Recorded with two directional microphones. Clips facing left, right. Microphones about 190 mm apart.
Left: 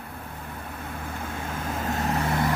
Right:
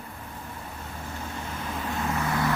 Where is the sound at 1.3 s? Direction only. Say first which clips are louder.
Left 3 dB; 50° left (ahead or behind).